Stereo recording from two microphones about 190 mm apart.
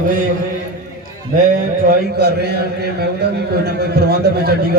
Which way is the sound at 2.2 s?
60° right (ahead or behind).